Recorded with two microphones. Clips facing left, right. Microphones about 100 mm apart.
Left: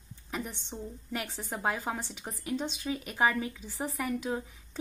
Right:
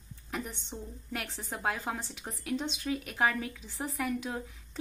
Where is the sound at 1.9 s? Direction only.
25° left (ahead or behind).